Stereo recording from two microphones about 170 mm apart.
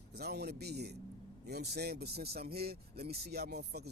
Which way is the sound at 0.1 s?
70° right (ahead or behind).